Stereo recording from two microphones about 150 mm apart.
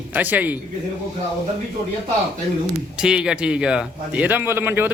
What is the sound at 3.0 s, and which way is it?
A man's voice, 5° right (ahead or behind).